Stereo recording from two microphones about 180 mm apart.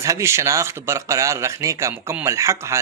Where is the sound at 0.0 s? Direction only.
15° right (ahead or behind).